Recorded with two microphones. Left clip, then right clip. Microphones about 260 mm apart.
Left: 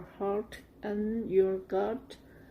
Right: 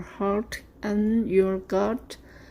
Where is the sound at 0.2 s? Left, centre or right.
Right.